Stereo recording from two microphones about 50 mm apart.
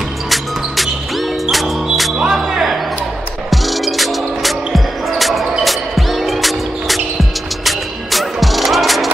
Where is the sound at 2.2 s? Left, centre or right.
Centre.